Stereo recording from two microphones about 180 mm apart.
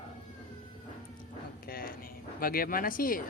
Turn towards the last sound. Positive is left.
turn(degrees=50)  # may be behind; listen again after turning